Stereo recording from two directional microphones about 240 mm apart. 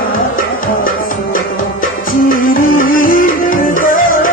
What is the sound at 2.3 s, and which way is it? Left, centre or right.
Music, left.